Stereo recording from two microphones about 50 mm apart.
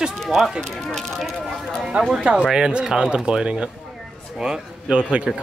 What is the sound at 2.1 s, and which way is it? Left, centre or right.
A man's voice, centre.